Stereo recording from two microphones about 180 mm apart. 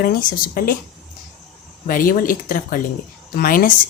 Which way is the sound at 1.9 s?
50° left (ahead or behind).